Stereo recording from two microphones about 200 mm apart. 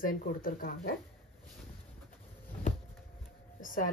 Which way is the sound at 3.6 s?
45° left (ahead or behind).